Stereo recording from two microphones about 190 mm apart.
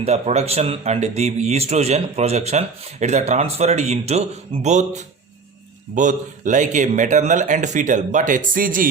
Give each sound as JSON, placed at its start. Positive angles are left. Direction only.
{"t": 0.0, "sound": "a man's voice", "side_deg": -35}